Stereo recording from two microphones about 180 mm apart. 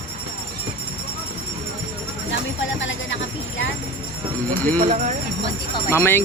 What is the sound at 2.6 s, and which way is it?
Speech, 90° left.